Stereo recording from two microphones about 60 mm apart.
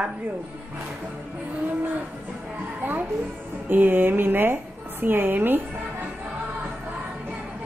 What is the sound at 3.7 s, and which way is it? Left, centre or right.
Speech, right.